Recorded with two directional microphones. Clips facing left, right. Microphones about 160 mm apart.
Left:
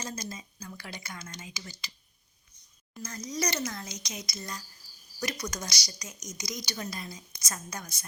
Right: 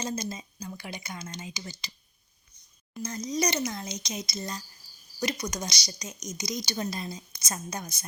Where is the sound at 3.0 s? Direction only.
20° right (ahead or behind).